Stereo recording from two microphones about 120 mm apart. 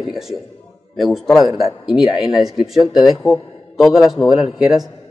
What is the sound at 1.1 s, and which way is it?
A man's voice, centre (ahead or behind).